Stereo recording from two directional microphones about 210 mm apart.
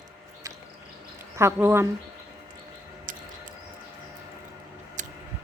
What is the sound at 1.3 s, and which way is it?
Speech, 10° right (ahead or behind).